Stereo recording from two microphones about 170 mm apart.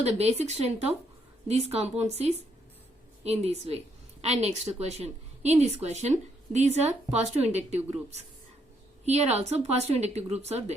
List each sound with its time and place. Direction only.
0.0 s a woman's voice: 40° right (ahead or behind)
9.0 s a woman's voice: 40° right (ahead or behind)